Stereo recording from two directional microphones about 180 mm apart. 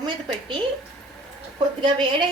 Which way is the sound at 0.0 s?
25° right (ahead or behind).